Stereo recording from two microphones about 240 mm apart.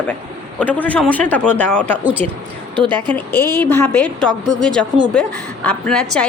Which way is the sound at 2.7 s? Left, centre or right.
Right.